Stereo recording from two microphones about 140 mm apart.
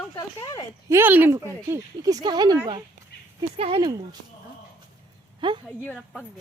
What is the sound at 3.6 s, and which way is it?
Speech, 35° right (ahead or behind).